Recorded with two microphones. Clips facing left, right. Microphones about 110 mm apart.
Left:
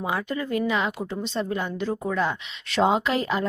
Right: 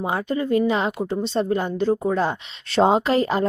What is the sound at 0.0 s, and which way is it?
A woman's voice, 30° right (ahead or behind).